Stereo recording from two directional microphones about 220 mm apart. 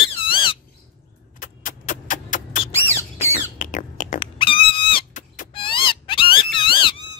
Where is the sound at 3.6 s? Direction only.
35° left (ahead or behind).